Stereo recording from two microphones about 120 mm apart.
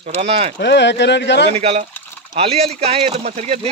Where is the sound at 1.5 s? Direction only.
60° right (ahead or behind).